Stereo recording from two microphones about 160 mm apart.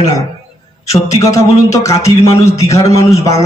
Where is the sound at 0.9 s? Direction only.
20° left (ahead or behind).